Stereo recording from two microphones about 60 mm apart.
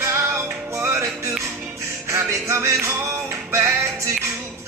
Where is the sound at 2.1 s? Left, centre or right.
Right.